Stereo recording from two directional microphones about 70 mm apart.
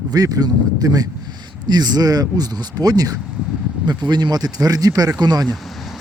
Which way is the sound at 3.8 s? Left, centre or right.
Right.